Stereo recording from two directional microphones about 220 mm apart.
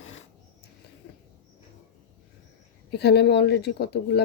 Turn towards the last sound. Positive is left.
turn(degrees=50)  # may be behind; listen again after turning